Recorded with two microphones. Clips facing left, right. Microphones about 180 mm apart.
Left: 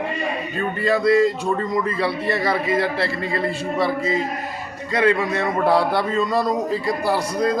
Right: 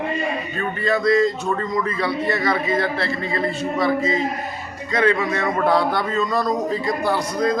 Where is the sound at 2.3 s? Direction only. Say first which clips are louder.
Even; 30° left (ahead or behind).